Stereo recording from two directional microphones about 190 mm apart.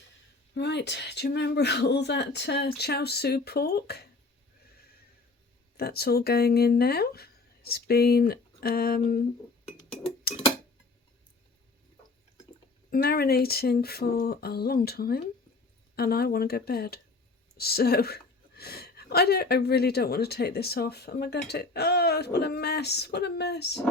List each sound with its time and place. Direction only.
0.5 s a woman's voice: 65° left (ahead or behind)
5.7 s a woman's voice: 55° left (ahead or behind)
10.3 s tick-tock: 55° left (ahead or behind)
12.9 s a woman's voice: 55° left (ahead or behind)